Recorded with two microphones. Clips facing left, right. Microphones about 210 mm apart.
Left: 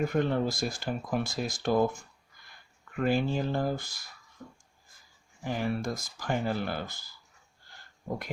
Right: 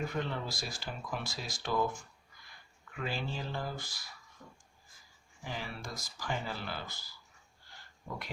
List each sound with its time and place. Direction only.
0.1 s speech: 50° left (ahead or behind)
2.9 s speech: 50° left (ahead or behind)
5.4 s speech: 50° left (ahead or behind)